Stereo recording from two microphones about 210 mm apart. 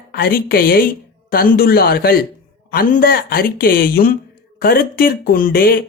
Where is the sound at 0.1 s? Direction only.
45° left (ahead or behind).